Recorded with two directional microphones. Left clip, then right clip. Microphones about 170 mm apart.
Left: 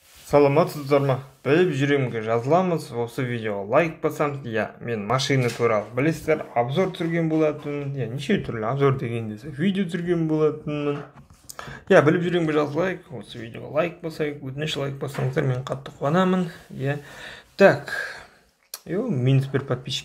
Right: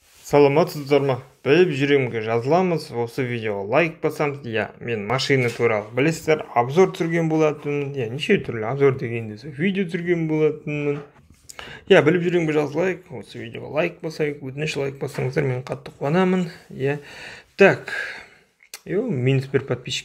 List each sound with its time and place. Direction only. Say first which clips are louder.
0.3 s speech: right 2 dB; 30° right (ahead or behind)
13.4 s speech: right 1 dB; 45° right (ahead or behind)